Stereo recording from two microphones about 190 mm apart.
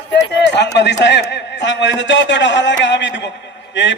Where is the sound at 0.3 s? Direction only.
65° left (ahead or behind).